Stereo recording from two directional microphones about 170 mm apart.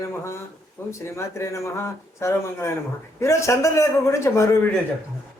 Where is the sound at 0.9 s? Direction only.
15° left (ahead or behind).